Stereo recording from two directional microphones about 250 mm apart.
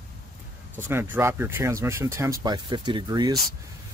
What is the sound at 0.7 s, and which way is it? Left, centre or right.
Speech, centre.